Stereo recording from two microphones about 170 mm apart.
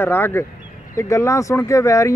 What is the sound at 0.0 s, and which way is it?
Speech, 15° left (ahead or behind).